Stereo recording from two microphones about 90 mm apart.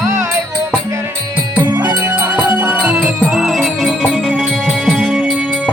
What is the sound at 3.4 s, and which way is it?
Music, centre (ahead or behind).